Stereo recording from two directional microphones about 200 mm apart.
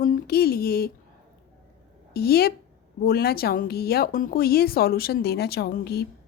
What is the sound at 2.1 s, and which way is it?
Speech, 50° left (ahead or behind).